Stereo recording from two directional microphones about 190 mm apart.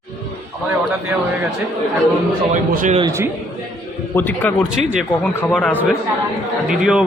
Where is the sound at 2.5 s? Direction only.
40° right (ahead or behind).